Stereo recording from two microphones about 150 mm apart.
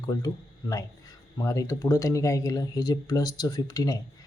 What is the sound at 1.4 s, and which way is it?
Speech, 20° left (ahead or behind).